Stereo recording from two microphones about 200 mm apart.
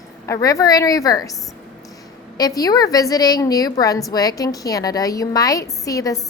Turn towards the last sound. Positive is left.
turn(degrees=15)  # may be behind; listen again after turning